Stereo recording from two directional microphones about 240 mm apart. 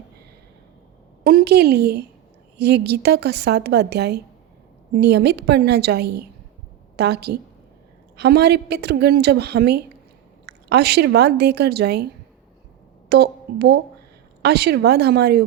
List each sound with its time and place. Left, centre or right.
1.2 s a woman's voice: right
13.1 s a woman's voice: right